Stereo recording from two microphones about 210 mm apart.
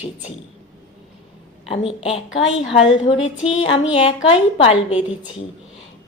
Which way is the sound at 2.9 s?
25° left (ahead or behind).